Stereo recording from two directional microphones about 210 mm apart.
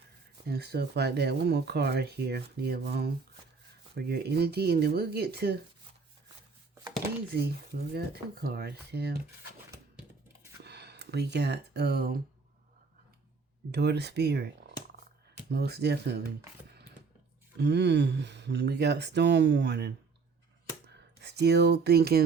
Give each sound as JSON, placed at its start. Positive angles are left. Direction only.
{"t": 0.4, "sound": "speech", "side_deg": -50}
{"t": 7.3, "sound": "speech", "side_deg": -50}
{"t": 10.6, "sound": "a sound", "side_deg": -50}
{"t": 13.7, "sound": "speech", "side_deg": -50}
{"t": 17.6, "sound": "speech", "side_deg": -55}
{"t": 20.8, "sound": "a sound", "side_deg": -55}